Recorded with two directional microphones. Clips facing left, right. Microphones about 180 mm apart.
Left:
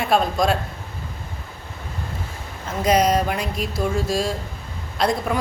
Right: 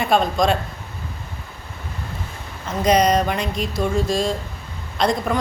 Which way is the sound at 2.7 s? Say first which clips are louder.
Right 1 dB; 5° left (ahead or behind).